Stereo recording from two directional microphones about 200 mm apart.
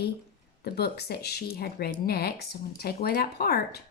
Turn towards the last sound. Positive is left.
turn(degrees=50)  # may be behind; listen again after turning